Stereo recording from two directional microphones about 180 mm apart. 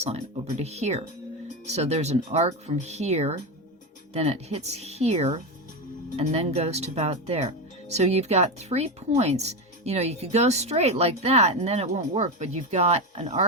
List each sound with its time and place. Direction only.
0.0 s speech: 35° right (ahead or behind)